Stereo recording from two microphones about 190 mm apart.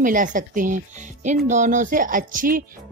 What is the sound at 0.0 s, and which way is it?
Speech, 45° right (ahead or behind).